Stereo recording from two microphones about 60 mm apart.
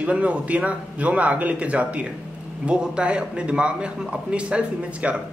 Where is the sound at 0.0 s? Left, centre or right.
Right.